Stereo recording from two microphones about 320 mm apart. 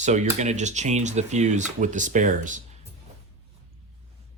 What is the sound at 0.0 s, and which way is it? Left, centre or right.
Speech, right.